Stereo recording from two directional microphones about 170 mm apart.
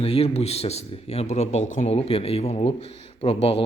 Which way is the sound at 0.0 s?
35° left (ahead or behind).